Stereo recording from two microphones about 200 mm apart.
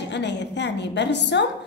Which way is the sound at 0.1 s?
60° left (ahead or behind).